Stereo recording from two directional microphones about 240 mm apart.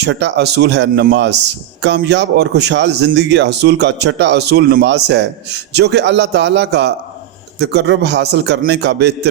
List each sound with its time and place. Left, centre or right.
0.0 s speech: right